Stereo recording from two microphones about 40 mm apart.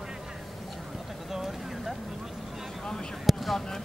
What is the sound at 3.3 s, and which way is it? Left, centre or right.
Basketball bounce, centre.